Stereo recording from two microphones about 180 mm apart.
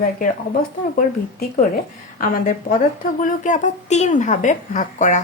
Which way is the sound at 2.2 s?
50° left (ahead or behind).